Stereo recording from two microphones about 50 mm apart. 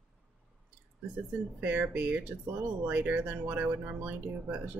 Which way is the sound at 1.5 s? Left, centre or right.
Right.